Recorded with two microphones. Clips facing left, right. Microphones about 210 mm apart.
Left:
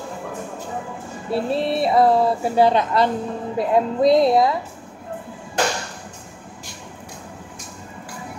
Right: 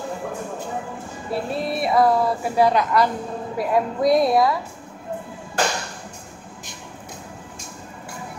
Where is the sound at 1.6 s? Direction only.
30° left (ahead or behind).